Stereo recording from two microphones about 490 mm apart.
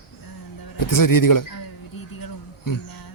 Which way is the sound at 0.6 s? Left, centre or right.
Left.